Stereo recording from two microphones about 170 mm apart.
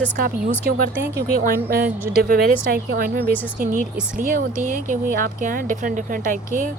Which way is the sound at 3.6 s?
50° right (ahead or behind).